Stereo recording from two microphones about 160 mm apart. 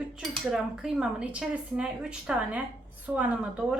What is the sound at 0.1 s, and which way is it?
A woman's voice, 5° right (ahead or behind).